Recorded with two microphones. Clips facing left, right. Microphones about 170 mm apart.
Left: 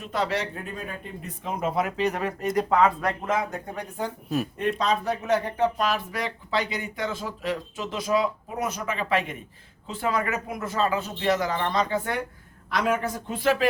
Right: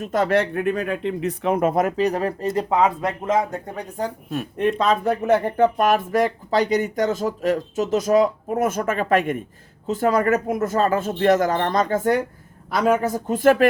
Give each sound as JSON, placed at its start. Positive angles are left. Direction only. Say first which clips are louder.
{"t": 0.0, "sound": "speech", "louder": "right 8 dB", "side_deg": -45}
{"t": 4.3, "sound": "speech", "louder": "right 3 dB", "side_deg": 0}
{"t": 4.8, "sound": "speech", "louder": "right 6 dB", "side_deg": -55}